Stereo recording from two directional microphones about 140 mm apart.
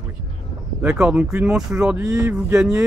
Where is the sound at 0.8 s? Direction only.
5° right (ahead or behind).